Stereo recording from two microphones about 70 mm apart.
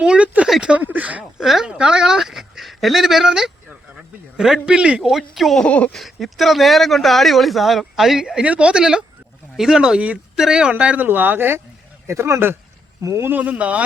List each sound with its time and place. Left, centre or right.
0.0 s a sound: centre
0.8 s a sound: right
1.2 s a sound: centre
1.6 s speech: centre
5.0 s speech: centre
5.6 s speech: centre
5.9 s speech: centre
11.0 s speech: right
13.0 s speech: right
13.2 s speech: right